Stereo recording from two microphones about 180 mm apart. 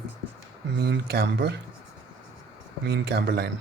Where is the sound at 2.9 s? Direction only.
65° right (ahead or behind).